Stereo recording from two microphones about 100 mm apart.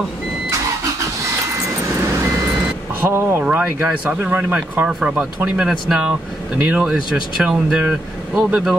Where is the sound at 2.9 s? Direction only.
25° right (ahead or behind); by 8.5 s 5° right (ahead or behind).